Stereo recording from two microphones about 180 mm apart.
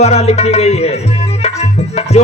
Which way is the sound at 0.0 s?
35° left (ahead or behind).